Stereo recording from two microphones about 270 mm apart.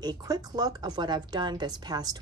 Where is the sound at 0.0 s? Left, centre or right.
Centre.